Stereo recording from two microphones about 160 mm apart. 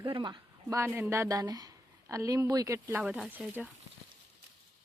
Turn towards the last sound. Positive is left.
turn(degrees=-10)  # may be behind; listen again after turning